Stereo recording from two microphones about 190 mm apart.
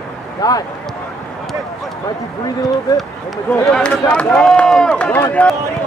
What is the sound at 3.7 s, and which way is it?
Speech, 5° left (ahead or behind).